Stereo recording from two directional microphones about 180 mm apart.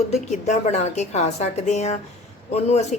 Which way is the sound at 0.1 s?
40° left (ahead or behind).